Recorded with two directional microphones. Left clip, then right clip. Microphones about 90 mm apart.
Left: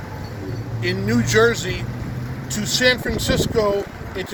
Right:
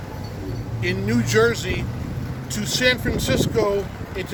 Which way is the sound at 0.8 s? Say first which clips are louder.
Left 2 dB; centre (ahead or behind).